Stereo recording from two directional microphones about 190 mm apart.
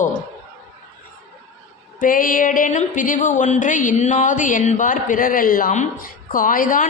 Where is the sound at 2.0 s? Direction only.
45° left (ahead or behind).